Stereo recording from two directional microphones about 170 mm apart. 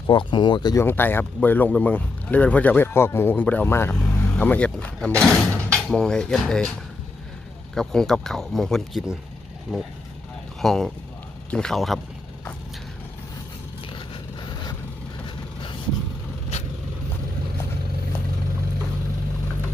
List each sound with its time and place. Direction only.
0.1 s speech: 25° left (ahead or behind); by 6.7 s 5° left (ahead or behind)
7.8 s speech: 5° left (ahead or behind)
13.9 s vehicle: 25° left (ahead or behind)